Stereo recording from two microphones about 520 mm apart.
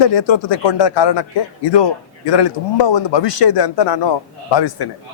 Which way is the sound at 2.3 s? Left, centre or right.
Left.